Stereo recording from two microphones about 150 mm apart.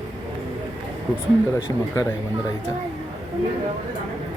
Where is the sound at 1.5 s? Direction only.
15° left (ahead or behind).